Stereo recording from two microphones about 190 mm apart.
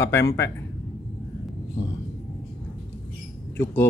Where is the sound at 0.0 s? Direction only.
15° left (ahead or behind).